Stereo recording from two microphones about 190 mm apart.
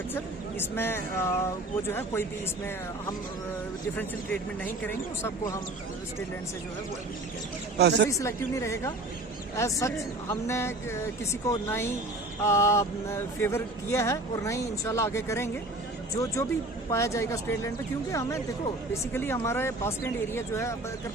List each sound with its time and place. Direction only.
0.6 s speech: 10° left (ahead or behind)
3.9 s speech: 10° left (ahead or behind)
7.8 s speech: 60° right (ahead or behind)
8.1 s speech: 15° left (ahead or behind)